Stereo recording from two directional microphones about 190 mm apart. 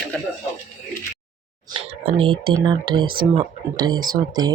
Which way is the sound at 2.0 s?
30° right (ahead or behind).